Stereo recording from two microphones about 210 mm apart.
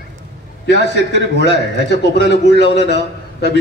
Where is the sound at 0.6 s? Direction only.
55° left (ahead or behind).